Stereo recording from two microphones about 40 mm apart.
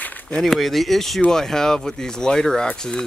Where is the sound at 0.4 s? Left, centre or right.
Centre.